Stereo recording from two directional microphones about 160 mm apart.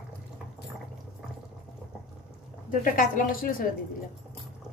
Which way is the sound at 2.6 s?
60° left (ahead or behind).